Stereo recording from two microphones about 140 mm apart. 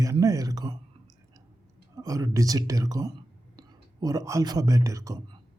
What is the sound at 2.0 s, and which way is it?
A man's voice, 25° right (ahead or behind).